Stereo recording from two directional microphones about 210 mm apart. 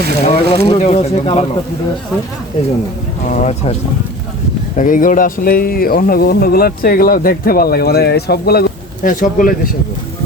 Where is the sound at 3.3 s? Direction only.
35° left (ahead or behind).